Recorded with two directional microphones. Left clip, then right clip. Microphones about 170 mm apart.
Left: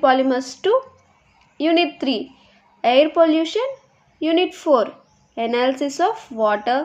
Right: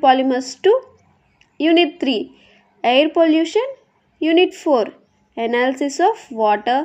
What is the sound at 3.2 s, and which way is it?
A woman's voice, centre (ahead or behind).